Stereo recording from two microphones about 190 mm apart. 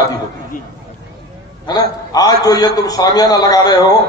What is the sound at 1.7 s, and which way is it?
A man's voice, 20° left (ahead or behind).